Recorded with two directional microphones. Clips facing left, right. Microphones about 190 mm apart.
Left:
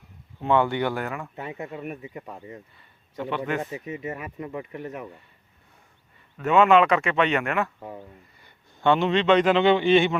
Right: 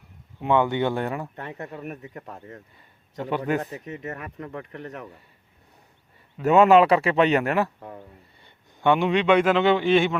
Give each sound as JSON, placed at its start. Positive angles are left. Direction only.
{"t": 0.3, "sound": "speech", "side_deg": -15}
{"t": 1.4, "sound": "speech", "side_deg": 5}
{"t": 3.2, "sound": "speech", "side_deg": -40}
{"t": 3.6, "sound": "speech", "side_deg": 5}
{"t": 6.4, "sound": "speech", "side_deg": -40}
{"t": 7.8, "sound": "speech", "side_deg": 5}
{"t": 8.7, "sound": "a man's voice", "side_deg": -15}